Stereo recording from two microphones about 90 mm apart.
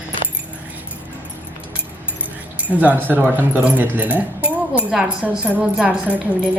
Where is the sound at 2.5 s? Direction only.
15° right (ahead or behind).